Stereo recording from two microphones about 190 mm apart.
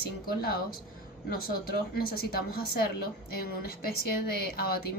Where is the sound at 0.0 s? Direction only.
55° left (ahead or behind).